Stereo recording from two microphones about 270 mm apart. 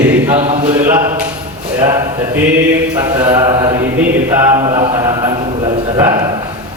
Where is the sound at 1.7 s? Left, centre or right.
Centre.